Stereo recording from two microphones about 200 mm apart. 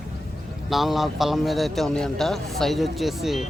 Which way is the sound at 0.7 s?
Centre (ahead or behind).